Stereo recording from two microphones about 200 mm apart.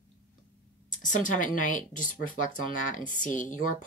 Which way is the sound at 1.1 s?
40° left (ahead or behind).